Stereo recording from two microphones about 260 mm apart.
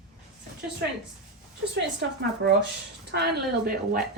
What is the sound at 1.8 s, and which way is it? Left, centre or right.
A woman's voice, right.